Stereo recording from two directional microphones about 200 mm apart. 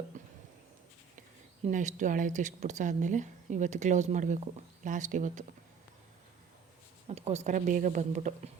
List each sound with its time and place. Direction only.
0.2 s a sound: 40° right (ahead or behind)
1.6 s speech: 35° right (ahead or behind)
7.1 s speech: 30° right (ahead or behind)